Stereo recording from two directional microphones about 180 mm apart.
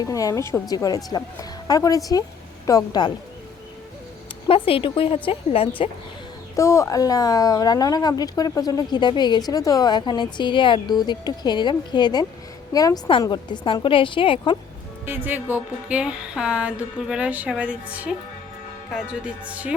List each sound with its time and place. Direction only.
0.0 s speech: 20° left (ahead or behind)
4.4 s a woman's voice: 30° left (ahead or behind)
6.6 s speech: 15° left (ahead or behind)
15.0 s speech: 10° right (ahead or behind)